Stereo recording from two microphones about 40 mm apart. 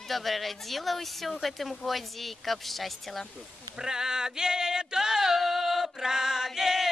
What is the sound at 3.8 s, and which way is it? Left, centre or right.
Male singing, centre.